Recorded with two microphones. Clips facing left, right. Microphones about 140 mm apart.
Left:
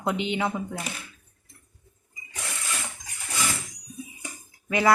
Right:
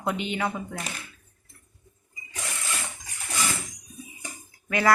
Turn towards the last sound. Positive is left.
turn(degrees=20)  # may be behind; listen again after turning